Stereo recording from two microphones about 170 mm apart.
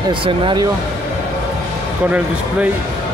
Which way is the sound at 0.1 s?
30° right (ahead or behind).